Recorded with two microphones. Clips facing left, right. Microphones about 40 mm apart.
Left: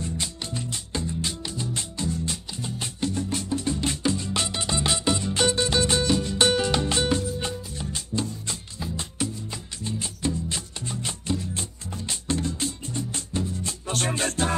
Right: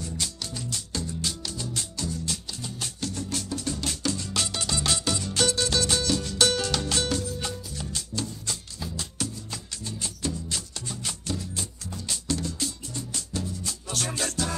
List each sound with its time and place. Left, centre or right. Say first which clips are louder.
0.0 s music: left 2 dB; left